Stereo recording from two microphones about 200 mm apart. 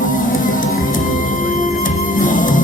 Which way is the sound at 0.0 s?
40° left (ahead or behind).